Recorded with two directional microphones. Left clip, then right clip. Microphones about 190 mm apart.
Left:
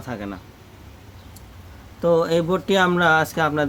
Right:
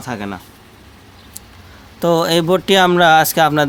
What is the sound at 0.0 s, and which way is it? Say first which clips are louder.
Speech: right 6 dB; 55° right (ahead or behind).